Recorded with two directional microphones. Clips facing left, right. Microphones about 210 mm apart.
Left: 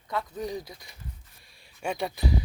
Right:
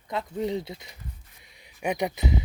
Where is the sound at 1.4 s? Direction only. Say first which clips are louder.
Right 3 dB; 20° right (ahead or behind).